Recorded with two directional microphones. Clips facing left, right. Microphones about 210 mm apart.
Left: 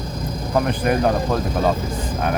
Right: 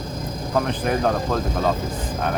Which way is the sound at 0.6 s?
10° left (ahead or behind).